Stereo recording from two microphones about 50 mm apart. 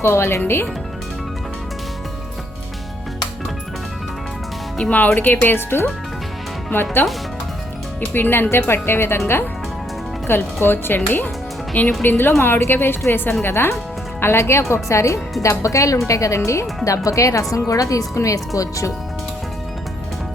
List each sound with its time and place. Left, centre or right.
0.0 s speech: left
4.9 s speech: left
7.0 s speech: left
8.1 s speech: left
12.4 s speech: left
13.4 s speech: left